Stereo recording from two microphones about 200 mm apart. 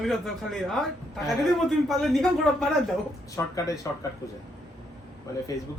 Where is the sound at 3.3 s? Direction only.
15° left (ahead or behind).